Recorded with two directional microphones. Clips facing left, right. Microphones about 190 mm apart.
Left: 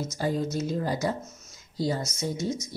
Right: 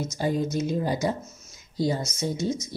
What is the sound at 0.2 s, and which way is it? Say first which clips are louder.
Speech: right 2 dB; 15° right (ahead or behind).